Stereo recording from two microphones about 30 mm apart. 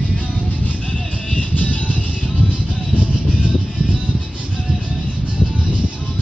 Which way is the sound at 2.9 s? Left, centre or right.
Right.